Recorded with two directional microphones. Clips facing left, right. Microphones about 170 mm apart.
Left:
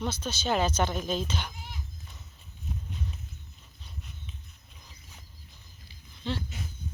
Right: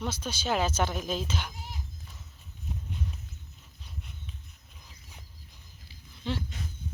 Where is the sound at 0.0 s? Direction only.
10° right (ahead or behind).